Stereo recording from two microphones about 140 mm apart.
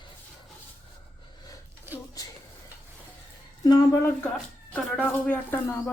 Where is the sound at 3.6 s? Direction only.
25° left (ahead or behind).